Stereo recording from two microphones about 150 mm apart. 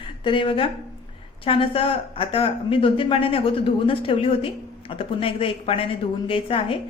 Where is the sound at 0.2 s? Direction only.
35° left (ahead or behind).